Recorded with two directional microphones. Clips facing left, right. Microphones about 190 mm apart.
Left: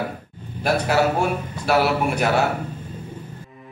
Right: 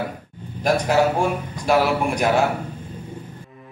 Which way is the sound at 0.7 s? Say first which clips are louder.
Right 1 dB; 10° left (ahead or behind).